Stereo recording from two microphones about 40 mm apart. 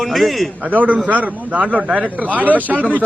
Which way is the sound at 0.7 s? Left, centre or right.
Right.